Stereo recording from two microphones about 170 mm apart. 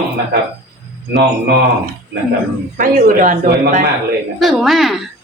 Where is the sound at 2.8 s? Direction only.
55° right (ahead or behind).